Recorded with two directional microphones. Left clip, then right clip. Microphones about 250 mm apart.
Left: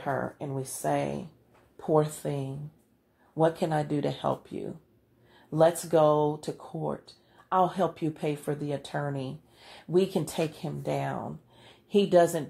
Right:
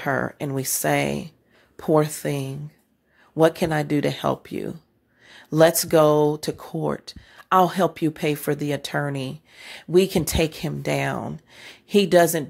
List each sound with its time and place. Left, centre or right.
0.0 s speech: right